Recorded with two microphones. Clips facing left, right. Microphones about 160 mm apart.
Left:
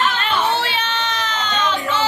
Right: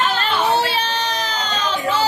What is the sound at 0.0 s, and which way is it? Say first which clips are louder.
Baby cry: even; 40° right (ahead or behind).